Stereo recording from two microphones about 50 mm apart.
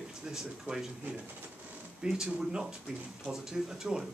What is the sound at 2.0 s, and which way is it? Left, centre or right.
Speech, centre.